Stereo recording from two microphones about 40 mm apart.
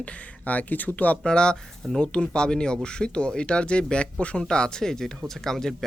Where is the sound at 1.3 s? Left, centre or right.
Left.